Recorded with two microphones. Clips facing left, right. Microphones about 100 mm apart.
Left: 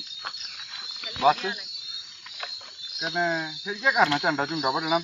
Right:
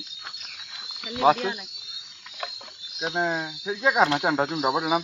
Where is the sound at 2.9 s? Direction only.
20° right (ahead or behind).